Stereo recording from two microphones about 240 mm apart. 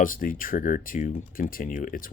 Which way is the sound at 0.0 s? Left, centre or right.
Left.